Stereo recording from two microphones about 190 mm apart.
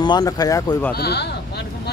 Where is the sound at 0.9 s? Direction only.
60° left (ahead or behind).